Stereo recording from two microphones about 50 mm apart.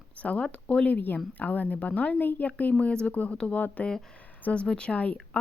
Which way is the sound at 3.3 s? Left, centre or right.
Left.